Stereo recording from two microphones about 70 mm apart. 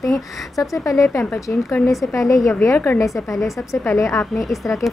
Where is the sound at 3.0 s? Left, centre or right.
Left.